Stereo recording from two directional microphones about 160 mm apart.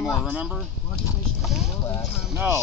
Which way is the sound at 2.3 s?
15° right (ahead or behind).